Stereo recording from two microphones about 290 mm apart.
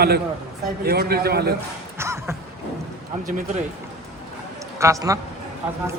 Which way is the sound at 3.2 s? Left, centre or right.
Right.